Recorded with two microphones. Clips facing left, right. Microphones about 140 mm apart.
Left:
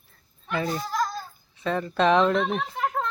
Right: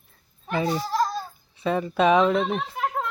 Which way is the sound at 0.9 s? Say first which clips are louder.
Right 3 dB; 30° right (ahead or behind).